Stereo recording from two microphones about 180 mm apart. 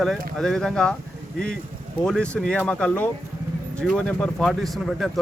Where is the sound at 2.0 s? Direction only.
5° left (ahead or behind).